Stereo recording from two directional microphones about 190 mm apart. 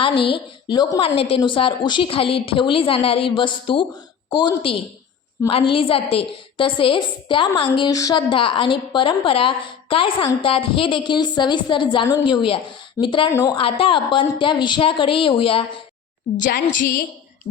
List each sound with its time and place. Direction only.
0.0 s a woman's voice: 25° left (ahead or behind)
16.4 s a woman's voice: 45° left (ahead or behind)